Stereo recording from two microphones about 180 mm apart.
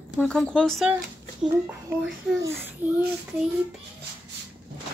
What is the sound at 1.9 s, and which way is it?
A woman's voice, 15° right (ahead or behind).